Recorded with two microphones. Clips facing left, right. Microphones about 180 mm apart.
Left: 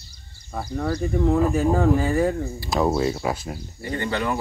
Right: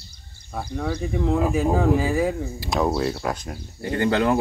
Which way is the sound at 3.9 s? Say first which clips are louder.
Right 5 dB; 65° right (ahead or behind).